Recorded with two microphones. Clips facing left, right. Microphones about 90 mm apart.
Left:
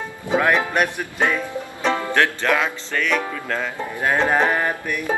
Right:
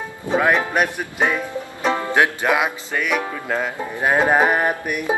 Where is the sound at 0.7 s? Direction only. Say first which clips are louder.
Right 1 dB; 10° right (ahead or behind).